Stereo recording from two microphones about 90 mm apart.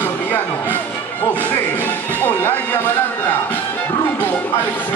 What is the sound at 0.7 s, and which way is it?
Music, 20° left (ahead or behind).